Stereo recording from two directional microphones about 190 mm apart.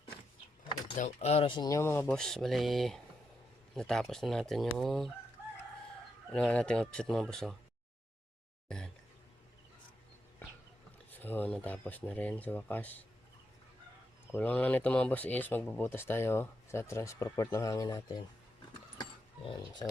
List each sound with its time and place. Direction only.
0.9 s speech: 35° left (ahead or behind); by 5.1 s centre (ahead or behind)
6.3 s speech: 5° left (ahead or behind)
11.1 s speech: 10° left (ahead or behind)
14.3 s speech: 10° left (ahead or behind)
18.9 s a sound: 25° left (ahead or behind)